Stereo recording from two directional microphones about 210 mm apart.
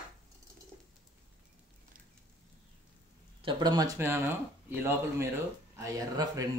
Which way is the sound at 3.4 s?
20° right (ahead or behind).